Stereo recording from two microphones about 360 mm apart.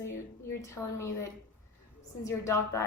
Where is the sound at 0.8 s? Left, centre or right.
Centre.